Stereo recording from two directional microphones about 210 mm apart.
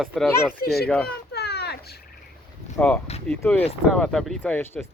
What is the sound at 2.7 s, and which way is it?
Speech, 5° left (ahead or behind).